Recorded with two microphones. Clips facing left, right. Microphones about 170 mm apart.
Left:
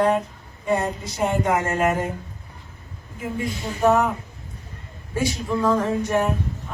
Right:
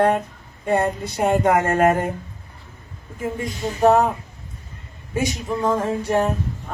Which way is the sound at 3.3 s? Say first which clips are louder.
Right 1 dB; 40° right (ahead or behind).